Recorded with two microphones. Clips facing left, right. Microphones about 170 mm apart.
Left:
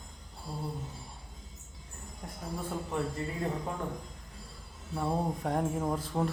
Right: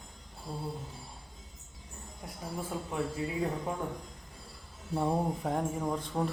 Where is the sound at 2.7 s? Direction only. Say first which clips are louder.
Left 1 dB; 5° right (ahead or behind).